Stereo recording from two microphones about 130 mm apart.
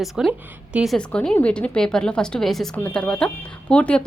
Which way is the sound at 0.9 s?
10° left (ahead or behind).